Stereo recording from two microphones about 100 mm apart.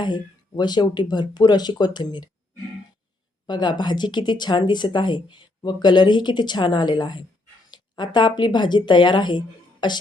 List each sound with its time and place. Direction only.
0.0 s speech: 45° left (ahead or behind)
3.4 s speech: 45° left (ahead or behind)